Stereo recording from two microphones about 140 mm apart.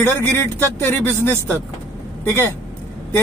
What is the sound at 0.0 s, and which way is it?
Speech, 15° left (ahead or behind).